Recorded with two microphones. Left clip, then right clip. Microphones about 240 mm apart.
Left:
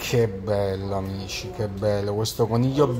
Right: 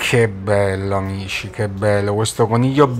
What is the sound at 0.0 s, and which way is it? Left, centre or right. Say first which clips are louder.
Speech: right 7 dB; centre.